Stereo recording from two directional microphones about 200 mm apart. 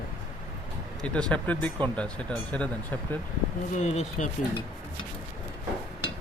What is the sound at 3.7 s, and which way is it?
Speech, 35° left (ahead or behind).